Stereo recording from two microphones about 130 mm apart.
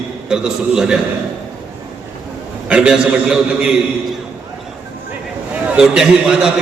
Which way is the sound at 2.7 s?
5° right (ahead or behind).